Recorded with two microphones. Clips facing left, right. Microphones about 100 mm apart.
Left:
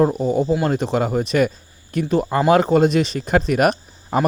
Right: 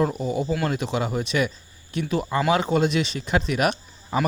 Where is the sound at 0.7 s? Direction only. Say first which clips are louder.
Left 6 dB; 40° left (ahead or behind).